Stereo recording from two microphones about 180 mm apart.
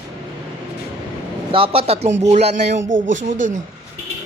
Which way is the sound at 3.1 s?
45° right (ahead or behind).